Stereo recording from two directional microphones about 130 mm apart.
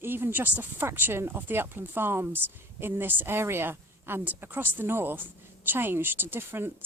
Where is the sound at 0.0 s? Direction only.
15° right (ahead or behind).